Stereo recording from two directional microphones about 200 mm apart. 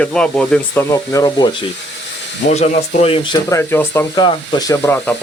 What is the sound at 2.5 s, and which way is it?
Speech, 30° left (ahead or behind).